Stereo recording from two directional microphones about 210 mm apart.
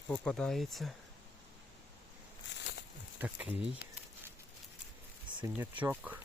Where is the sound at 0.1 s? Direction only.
5° left (ahead or behind).